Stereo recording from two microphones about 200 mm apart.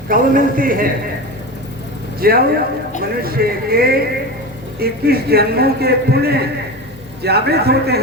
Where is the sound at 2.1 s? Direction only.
50° right (ahead or behind).